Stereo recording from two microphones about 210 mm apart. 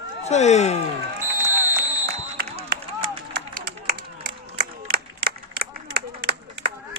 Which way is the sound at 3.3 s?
45° right (ahead or behind).